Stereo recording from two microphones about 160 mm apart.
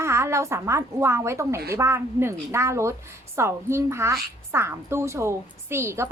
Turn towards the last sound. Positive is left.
turn(degrees=-15)  # may be behind; listen again after turning